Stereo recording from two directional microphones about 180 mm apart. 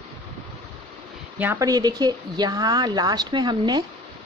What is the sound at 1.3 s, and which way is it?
Speech, 10° right (ahead or behind).